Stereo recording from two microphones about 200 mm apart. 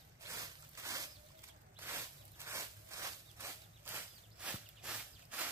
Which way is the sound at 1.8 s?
10° right (ahead or behind).